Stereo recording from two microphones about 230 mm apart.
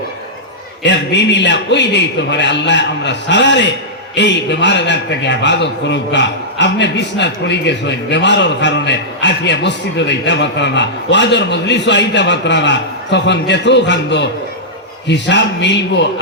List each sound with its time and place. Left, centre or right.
0.8 s a man's voice: left